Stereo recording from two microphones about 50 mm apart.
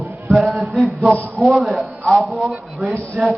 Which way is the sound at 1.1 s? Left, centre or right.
Left.